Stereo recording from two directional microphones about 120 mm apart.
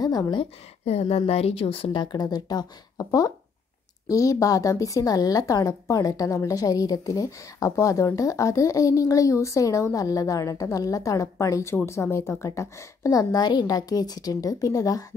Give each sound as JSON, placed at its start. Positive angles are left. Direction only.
{"t": 0.0, "sound": "a woman's voice", "side_deg": 35}
{"t": 0.8, "sound": "a woman's voice", "side_deg": 60}